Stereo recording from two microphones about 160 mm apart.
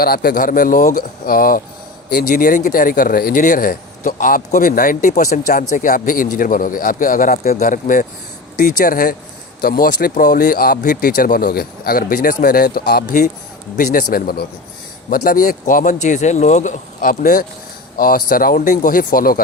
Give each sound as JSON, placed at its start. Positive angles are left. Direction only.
{"t": 0.0, "sound": "speech", "side_deg": 70}
{"t": 13.7, "sound": "speech", "side_deg": 60}